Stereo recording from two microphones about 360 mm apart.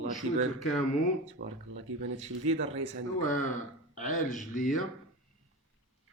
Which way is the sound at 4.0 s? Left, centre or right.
Left.